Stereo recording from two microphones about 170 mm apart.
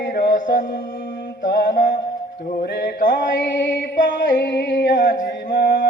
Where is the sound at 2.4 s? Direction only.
65° left (ahead or behind).